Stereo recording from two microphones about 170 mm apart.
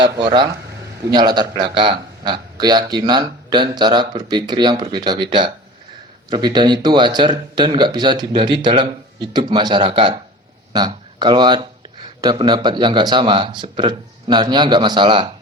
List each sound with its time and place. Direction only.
0.0 s a man's voice: 25° right (ahead or behind)